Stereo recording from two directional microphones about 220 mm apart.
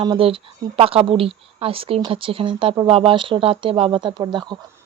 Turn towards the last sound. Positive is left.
turn(degrees=-20)  # may be behind; listen again after turning